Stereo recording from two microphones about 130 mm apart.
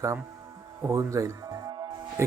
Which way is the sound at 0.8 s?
25° right (ahead or behind).